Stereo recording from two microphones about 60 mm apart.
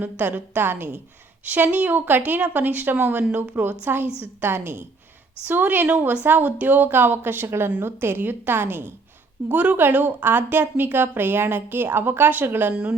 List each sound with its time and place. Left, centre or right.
0.0 s a woman's voice: right
9.5 s a woman's voice: right